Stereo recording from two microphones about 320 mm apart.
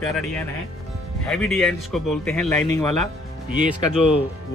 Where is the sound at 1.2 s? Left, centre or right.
Centre.